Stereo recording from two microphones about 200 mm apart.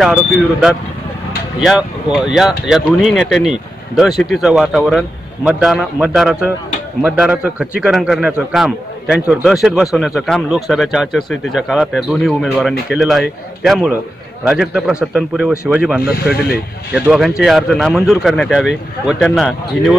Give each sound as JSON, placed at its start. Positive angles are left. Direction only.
{"t": 0.0, "sound": "a man's voice", "side_deg": 0}